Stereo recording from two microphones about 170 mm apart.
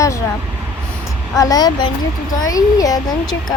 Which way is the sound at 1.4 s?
20° left (ahead or behind).